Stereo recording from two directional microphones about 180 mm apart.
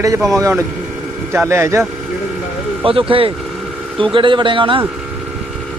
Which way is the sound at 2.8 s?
30° right (ahead or behind).